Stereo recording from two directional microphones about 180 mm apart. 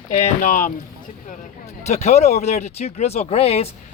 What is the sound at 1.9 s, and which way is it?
Speech, 40° left (ahead or behind).